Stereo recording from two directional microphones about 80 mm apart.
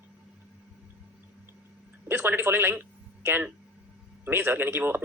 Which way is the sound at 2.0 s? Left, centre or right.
Right.